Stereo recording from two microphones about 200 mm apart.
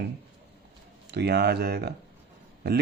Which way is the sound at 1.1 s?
55° right (ahead or behind).